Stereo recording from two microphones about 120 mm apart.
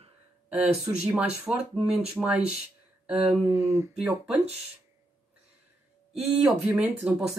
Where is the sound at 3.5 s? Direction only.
25° right (ahead or behind).